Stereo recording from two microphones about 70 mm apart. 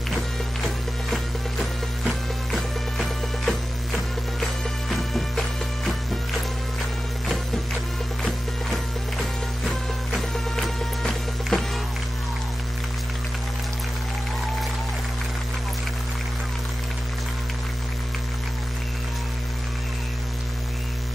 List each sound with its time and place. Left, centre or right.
1.1 s music: centre
8.2 s music: centre
10.1 s music: centre